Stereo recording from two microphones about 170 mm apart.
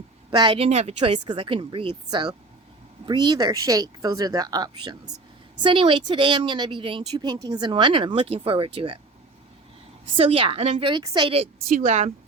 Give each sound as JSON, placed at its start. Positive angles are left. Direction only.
{"t": 0.3, "sound": "speech", "side_deg": -25}
{"t": 10.2, "sound": "speech", "side_deg": -30}
{"t": 11.7, "sound": "speech", "side_deg": -45}